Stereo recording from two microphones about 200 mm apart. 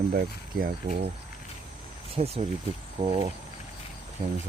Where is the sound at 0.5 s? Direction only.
45° right (ahead or behind).